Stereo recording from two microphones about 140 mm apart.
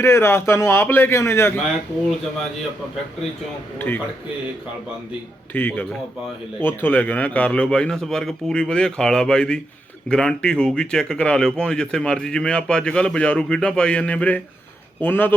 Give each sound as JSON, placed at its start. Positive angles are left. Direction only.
{"t": 0.0, "sound": "speech", "side_deg": 20}
{"t": 3.8, "sound": "speech", "side_deg": 15}
{"t": 5.5, "sound": "speech", "side_deg": 15}